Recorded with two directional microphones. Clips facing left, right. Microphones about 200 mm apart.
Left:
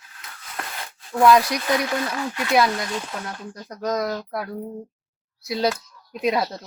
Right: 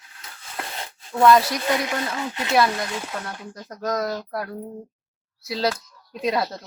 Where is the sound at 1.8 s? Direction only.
20° right (ahead or behind).